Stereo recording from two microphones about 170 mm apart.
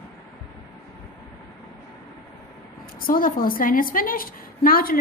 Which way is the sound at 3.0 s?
55° left (ahead or behind).